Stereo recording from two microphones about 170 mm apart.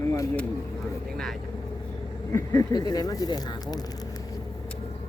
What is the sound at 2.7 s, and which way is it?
Speech, 25° left (ahead or behind).